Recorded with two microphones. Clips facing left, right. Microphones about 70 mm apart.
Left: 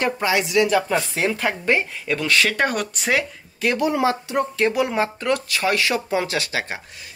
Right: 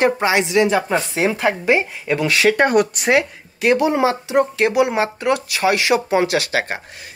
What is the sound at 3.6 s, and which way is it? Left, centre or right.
Speech, right.